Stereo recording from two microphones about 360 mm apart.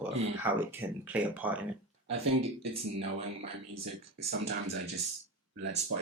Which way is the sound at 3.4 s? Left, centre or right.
Centre.